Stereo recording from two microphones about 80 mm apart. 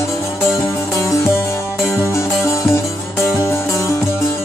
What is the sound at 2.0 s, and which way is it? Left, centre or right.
Music, left.